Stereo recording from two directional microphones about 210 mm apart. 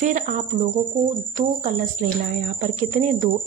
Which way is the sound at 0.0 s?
35° right (ahead or behind).